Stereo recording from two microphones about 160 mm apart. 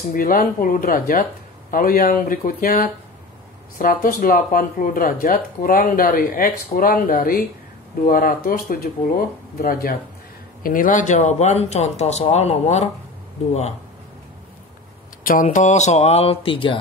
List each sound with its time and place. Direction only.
0.1 s speech: 60° left (ahead or behind); by 13.7 s 45° left (ahead or behind)
15.4 s speech: 50° left (ahead or behind)